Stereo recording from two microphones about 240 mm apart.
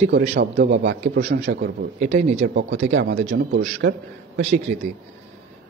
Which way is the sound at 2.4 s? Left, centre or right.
Right.